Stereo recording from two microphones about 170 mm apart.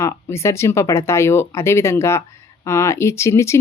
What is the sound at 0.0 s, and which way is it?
Speech, 15° left (ahead or behind).